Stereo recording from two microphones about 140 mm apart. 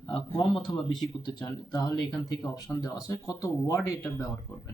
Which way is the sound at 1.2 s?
30° left (ahead or behind).